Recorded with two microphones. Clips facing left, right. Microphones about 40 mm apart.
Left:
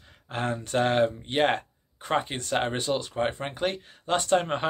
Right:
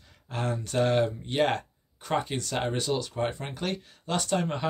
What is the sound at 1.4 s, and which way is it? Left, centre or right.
Speech, left.